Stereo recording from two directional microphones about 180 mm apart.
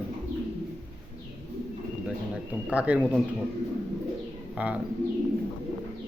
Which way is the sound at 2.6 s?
5° right (ahead or behind).